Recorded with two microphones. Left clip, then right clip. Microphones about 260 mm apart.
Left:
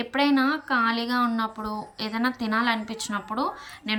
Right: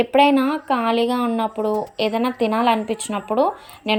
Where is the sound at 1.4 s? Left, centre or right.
Centre.